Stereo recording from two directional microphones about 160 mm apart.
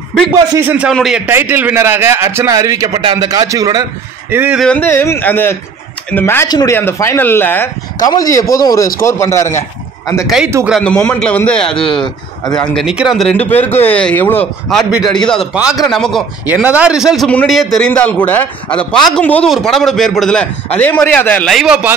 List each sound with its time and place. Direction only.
0.5 s a man's voice: 15° right (ahead or behind)
4.3 s a man's voice: 10° right (ahead or behind)
4.6 s a man's voice: 10° left (ahead or behind)
8.0 s a man's voice: 25° left (ahead or behind)
10.2 s speech: 5° right (ahead or behind)
11.8 s speech: 30° left (ahead or behind)
12.7 s speech: 5° right (ahead or behind)
16.6 s a man's voice: 10° right (ahead or behind); by 21.5 s 10° left (ahead or behind)
21.5 s speech: centre (ahead or behind)